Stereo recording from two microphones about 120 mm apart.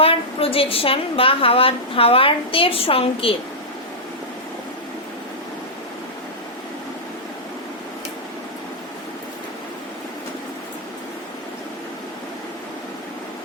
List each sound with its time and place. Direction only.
0.0 s a woman's voice: 50° left (ahead or behind)